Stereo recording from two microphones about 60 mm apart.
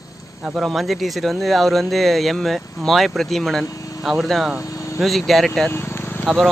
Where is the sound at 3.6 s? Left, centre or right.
Left.